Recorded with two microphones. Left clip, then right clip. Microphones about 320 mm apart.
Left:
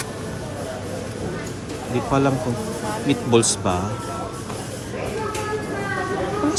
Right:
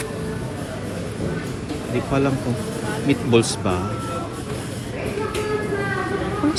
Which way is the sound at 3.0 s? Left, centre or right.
Centre.